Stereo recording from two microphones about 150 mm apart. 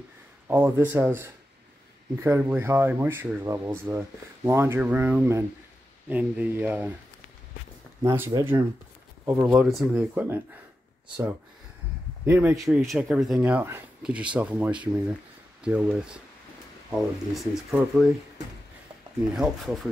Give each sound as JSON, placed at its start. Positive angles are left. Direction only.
{"t": 0.5, "sound": "speech", "side_deg": -15}
{"t": 8.0, "sound": "speech", "side_deg": -20}
{"t": 12.3, "sound": "speech", "side_deg": -10}
{"t": 12.5, "sound": "speech", "side_deg": 0}
{"t": 19.3, "sound": "speech", "side_deg": 0}